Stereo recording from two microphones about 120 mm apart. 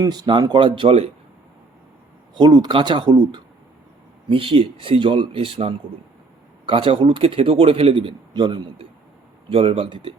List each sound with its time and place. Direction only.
0.0 s speech: 35° right (ahead or behind)
2.3 s a man's voice: 35° right (ahead or behind)